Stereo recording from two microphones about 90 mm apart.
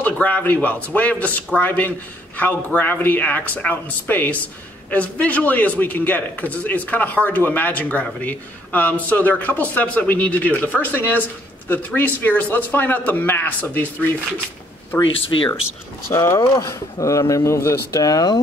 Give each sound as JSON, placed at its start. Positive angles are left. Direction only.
{"t": 0.0, "sound": "a man's voice", "side_deg": 15}
{"t": 16.3, "sound": "speech", "side_deg": 40}